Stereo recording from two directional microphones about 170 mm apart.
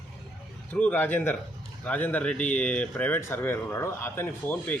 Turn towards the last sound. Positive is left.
turn(degrees=10)  # may be behind; listen again after turning